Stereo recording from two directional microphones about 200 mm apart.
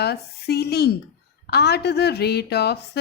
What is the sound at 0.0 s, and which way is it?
A woman's voice, 55° left (ahead or behind).